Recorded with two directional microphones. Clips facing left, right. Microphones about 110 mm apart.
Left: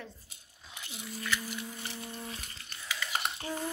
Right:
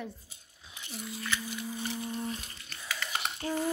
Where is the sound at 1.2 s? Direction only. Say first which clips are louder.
Even; 20° right (ahead or behind).